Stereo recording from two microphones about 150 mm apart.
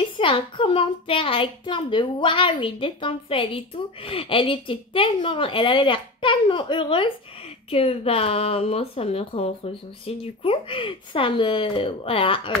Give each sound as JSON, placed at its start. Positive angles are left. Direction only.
{"t": 0.0, "sound": "a child's voice", "side_deg": 35}